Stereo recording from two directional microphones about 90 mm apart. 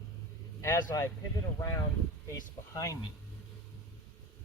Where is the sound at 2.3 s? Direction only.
40° left (ahead or behind).